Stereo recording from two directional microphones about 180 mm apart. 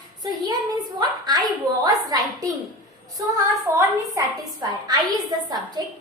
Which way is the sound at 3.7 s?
20° right (ahead or behind).